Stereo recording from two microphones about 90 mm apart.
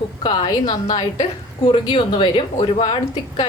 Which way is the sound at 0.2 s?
50° left (ahead or behind).